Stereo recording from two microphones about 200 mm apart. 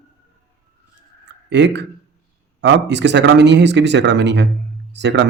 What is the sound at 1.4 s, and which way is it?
Speech, 60° right (ahead or behind).